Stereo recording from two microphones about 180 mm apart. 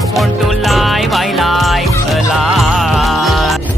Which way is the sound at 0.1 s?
Centre (ahead or behind).